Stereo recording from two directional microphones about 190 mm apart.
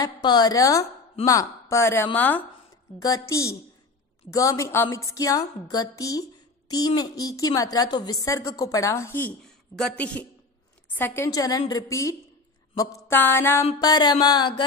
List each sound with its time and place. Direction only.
0.0 s a woman's voice: 20° left (ahead or behind)